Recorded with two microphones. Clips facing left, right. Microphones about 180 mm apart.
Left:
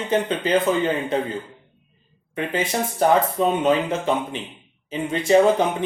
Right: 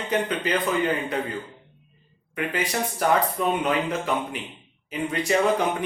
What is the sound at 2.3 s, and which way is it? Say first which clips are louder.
Speech: left 3 dB; 25° left (ahead or behind).